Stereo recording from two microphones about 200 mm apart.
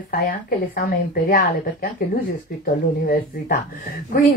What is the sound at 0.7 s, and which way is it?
Speech, 45° left (ahead or behind).